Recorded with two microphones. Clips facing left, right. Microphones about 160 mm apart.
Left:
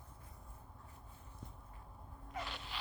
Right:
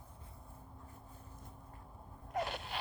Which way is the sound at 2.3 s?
50° right (ahead or behind).